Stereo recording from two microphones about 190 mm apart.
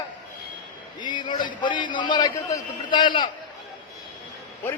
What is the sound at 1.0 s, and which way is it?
A man's voice, 25° left (ahead or behind).